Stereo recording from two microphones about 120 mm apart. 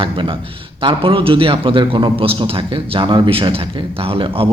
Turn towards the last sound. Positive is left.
turn(degrees=-50)  # may be behind; listen again after turning